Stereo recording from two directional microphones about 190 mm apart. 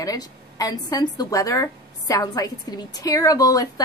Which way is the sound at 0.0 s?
20° left (ahead or behind).